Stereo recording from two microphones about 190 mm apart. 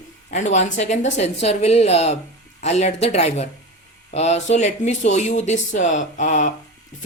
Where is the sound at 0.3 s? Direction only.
40° left (ahead or behind).